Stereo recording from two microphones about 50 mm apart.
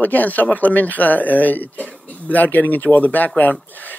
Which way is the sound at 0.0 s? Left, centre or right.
Left.